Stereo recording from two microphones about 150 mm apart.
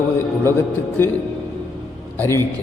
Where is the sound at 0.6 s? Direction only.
15° left (ahead or behind).